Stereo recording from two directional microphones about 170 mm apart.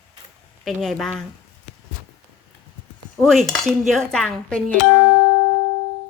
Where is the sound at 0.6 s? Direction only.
Centre (ahead or behind).